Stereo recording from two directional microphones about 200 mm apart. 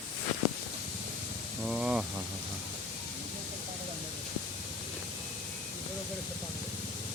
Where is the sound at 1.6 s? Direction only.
5° right (ahead or behind).